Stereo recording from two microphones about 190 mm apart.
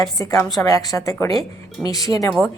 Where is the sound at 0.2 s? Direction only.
15° left (ahead or behind).